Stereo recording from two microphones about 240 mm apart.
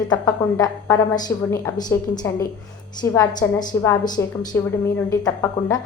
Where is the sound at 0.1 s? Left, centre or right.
Centre.